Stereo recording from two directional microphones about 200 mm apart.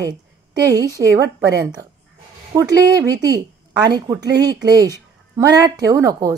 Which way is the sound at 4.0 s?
20° right (ahead or behind).